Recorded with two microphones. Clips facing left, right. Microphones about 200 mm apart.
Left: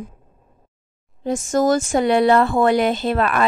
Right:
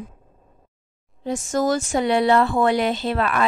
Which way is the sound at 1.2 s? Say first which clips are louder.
Left 4 dB; 45° left (ahead or behind).